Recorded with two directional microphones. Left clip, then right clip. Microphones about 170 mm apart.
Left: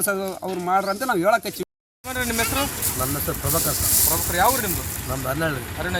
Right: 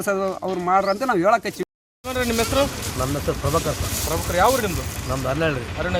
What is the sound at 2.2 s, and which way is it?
Speech, 80° right.